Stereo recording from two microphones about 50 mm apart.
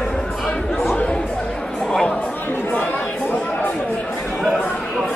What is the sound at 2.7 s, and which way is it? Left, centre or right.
Chatter, left.